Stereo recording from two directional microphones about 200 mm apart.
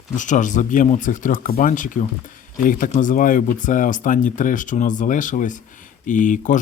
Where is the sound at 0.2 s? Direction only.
40° left (ahead or behind).